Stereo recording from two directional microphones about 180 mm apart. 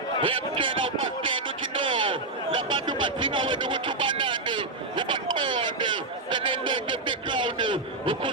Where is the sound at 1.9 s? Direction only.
25° right (ahead or behind).